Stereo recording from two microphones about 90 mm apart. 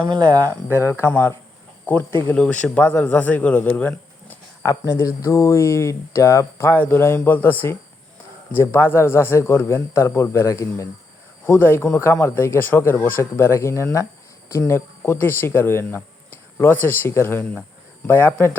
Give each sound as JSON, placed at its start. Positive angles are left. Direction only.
{"t": 0.0, "sound": "speech", "side_deg": -55}
{"t": 0.5, "sound": "speech", "side_deg": 30}
{"t": 4.6, "sound": "speech", "side_deg": 40}
{"t": 11.4, "sound": "speech", "side_deg": 25}